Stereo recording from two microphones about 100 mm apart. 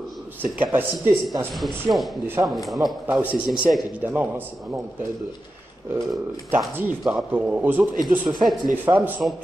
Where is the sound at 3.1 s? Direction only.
20° right (ahead or behind).